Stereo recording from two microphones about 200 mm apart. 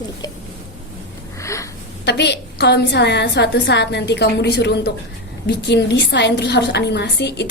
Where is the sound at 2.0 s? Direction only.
55° left (ahead or behind).